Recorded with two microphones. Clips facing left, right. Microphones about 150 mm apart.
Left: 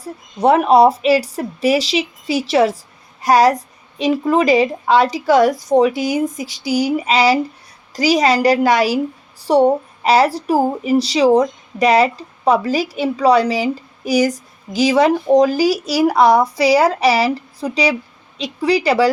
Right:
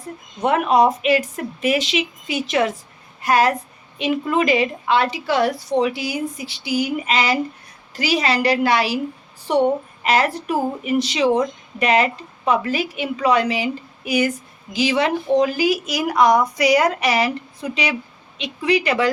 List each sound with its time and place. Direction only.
0.0 s a woman's voice: 35° left (ahead or behind)